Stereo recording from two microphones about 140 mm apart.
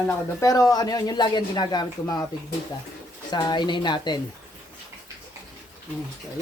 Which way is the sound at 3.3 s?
30° left (ahead or behind).